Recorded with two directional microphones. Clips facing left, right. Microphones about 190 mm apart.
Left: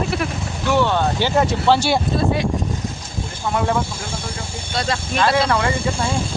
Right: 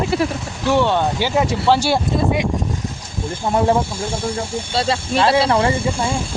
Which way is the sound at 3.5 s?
30° right (ahead or behind).